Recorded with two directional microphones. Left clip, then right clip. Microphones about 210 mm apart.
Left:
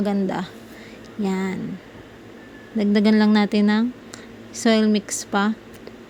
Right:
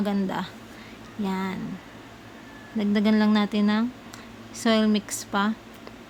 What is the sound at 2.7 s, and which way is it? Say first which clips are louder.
A woman's voice: left 5 dB; 20° left (ahead or behind).